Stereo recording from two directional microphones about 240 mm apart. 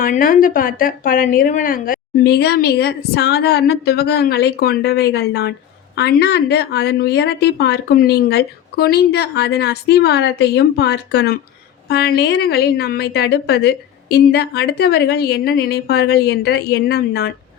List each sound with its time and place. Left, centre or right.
0.0 s a woman's voice: left